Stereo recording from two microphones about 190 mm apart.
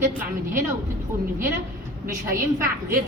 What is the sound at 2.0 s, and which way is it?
Speech, 15° right (ahead or behind).